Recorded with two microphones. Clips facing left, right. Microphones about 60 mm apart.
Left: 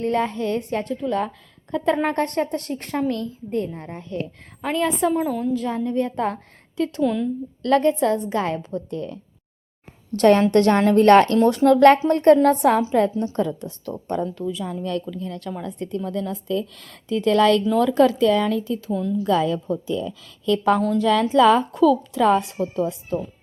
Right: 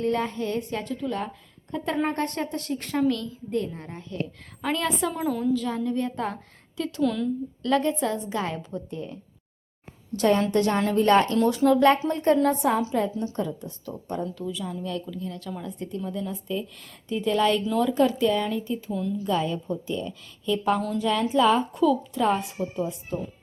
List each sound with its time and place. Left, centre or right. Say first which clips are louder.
0.0 s a woman's voice: left 4 dB; left
4.6 s a woman's voice: left 5 dB; centre
5.5 s a woman's voice: left 4 dB; left
7.0 s speech: left 2 dB; centre
7.6 s speech: left 6 dB; left
8.9 s speech: left 5 dB; left
10.2 s speech: left 6 dB; left
13.3 s a woman's voice: left 6 dB; left
15.8 s a woman's voice: left 5 dB; left
21.0 s a woman's voice: left 6 dB; left